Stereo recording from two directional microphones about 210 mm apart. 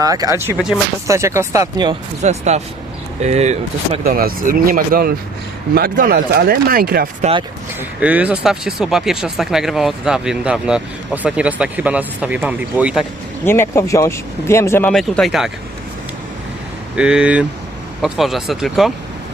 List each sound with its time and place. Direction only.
0.0 s speech: 15° right (ahead or behind)
2.2 s speech: 30° right (ahead or behind)
4.0 s speech: 45° right (ahead or behind)
7.8 s speech: 5° right (ahead or behind)
13.4 s speech: 10° left (ahead or behind)
16.9 s speech: 5° right (ahead or behind)